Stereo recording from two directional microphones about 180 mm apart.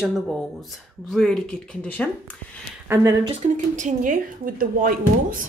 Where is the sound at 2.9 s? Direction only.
15° right (ahead or behind).